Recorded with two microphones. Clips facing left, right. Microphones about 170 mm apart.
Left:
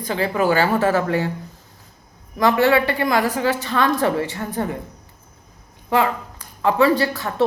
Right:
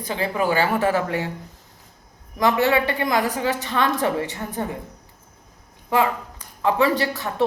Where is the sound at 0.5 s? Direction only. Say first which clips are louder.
Left 1 dB; 15° right (ahead or behind).